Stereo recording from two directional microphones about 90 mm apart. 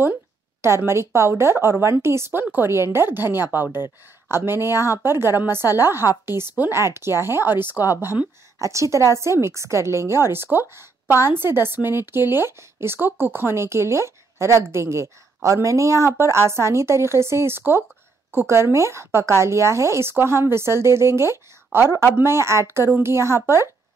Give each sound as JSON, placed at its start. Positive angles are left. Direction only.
{"t": 0.0, "sound": "a woman's voice", "side_deg": -25}